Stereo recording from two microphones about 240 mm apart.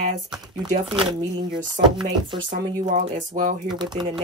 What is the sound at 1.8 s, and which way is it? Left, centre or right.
Speech, centre.